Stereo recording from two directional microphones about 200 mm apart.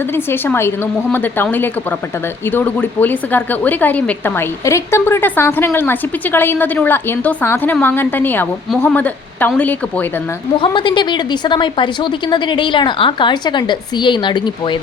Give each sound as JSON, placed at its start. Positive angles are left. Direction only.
{"t": 0.1, "sound": "a woman's voice", "side_deg": 10}
{"t": 10.6, "sound": "a woman's voice", "side_deg": 25}